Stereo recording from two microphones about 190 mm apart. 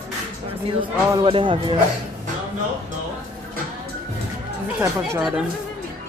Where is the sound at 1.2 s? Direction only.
25° right (ahead or behind).